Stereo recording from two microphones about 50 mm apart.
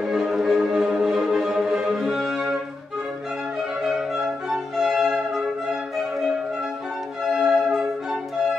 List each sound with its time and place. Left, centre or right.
0.0 s music: centre
3.8 s music: centre
7.3 s music: centre